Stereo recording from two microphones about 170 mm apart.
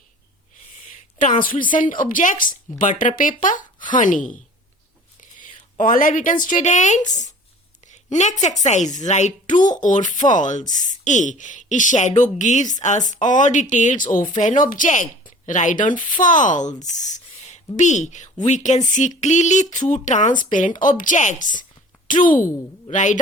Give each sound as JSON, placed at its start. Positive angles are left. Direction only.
{"t": 1.2, "sound": "speech", "side_deg": 50}
{"t": 5.4, "sound": "speech", "side_deg": 50}